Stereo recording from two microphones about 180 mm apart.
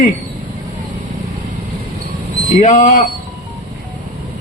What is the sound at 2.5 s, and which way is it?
Speech, 45° left (ahead or behind).